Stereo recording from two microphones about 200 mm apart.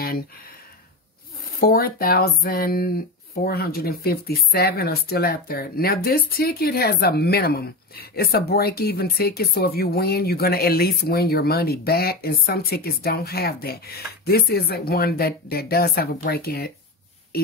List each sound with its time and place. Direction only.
1.6 s speech: 50° left (ahead or behind)